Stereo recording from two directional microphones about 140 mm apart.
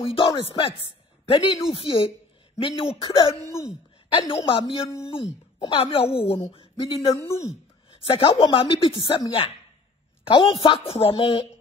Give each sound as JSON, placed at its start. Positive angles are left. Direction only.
{"t": 0.0, "sound": "a woman's voice", "side_deg": 40}
{"t": 3.4, "sound": "speech", "side_deg": 20}
{"t": 4.1, "sound": "a woman's voice", "side_deg": 40}
{"t": 7.2, "sound": "speech", "side_deg": 20}
{"t": 8.0, "sound": "a woman's voice", "side_deg": 40}